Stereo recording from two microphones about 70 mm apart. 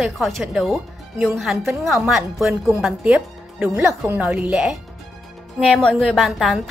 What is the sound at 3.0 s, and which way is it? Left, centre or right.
Speech, right.